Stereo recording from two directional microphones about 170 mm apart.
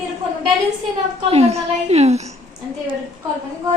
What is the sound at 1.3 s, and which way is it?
A woman's voice, 35° right (ahead or behind).